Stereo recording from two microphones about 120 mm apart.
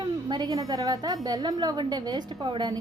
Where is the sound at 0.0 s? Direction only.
35° right (ahead or behind).